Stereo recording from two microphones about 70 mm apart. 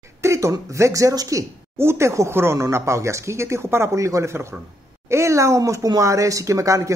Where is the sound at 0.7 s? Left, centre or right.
Right.